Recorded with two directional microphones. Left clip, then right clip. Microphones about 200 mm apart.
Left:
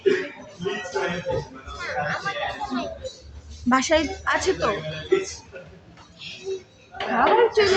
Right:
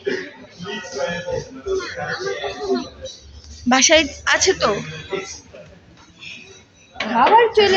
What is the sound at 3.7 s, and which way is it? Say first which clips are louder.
A woman's voice: right 6 dB; centre (ahead or behind).